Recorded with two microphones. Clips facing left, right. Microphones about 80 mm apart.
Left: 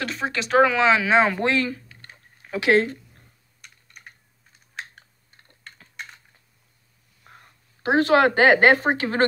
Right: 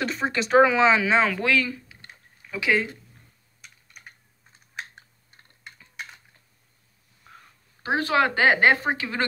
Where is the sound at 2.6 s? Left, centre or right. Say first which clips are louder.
Left 5 dB; left.